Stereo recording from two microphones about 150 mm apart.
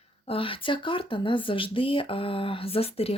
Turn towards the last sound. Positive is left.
turn(degrees=40)  # may be behind; listen again after turning